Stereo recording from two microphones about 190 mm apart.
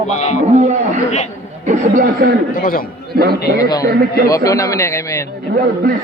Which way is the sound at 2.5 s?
50° left (ahead or behind).